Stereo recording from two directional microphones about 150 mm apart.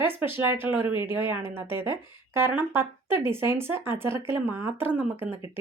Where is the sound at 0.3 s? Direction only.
15° right (ahead or behind).